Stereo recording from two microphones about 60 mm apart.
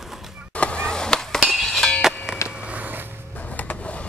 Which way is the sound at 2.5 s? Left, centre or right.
Right.